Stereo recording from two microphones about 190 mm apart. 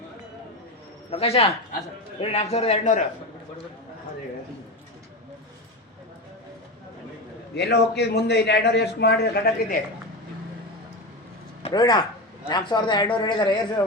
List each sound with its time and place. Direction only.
1.1 s a man's voice: 30° left (ahead or behind)
7.5 s a man's voice: 60° left (ahead or behind)
11.6 s a man's voice: 20° left (ahead or behind)